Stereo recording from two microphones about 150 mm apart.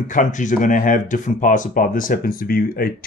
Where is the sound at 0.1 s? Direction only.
60° left (ahead or behind).